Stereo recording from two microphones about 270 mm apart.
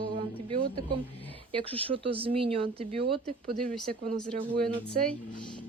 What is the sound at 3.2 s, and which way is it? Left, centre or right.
Speech, centre.